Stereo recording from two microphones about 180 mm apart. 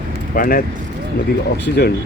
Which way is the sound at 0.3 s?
55° left (ahead or behind).